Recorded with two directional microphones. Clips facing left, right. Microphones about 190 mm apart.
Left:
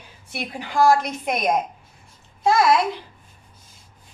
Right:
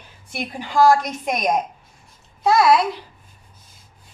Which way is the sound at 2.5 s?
Centre (ahead or behind).